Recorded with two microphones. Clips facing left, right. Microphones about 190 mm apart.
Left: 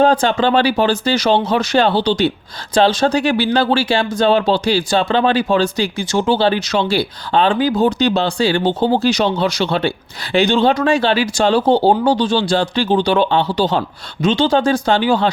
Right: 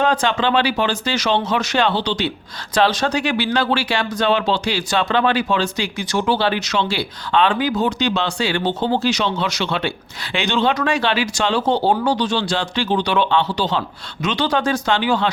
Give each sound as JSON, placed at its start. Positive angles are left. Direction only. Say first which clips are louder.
{"t": 0.0, "sound": "speech", "louder": "left 5 dB", "side_deg": 35}